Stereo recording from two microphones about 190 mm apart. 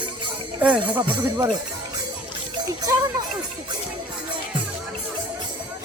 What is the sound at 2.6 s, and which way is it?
Speech, 20° right (ahead or behind).